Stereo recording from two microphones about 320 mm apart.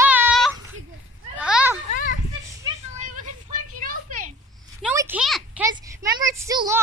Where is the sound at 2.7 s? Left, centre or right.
Right.